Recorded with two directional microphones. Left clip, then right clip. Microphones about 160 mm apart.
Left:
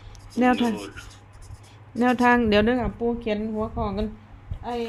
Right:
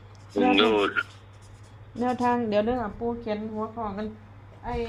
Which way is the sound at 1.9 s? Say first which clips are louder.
Left 6 dB; 35° left (ahead or behind).